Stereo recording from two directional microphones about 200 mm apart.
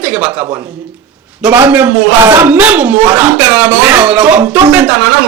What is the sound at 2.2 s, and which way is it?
Speech, 15° right (ahead or behind).